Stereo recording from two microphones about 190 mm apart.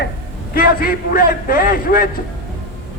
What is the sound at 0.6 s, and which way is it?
A man's voice, 50° left (ahead or behind).